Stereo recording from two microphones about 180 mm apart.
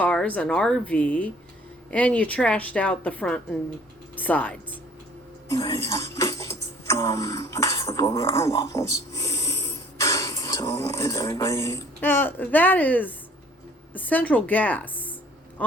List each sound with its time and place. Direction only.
0.0 s a woman's voice: 5° left (ahead or behind)